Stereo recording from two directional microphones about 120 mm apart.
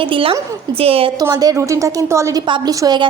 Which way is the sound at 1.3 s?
30° right (ahead or behind).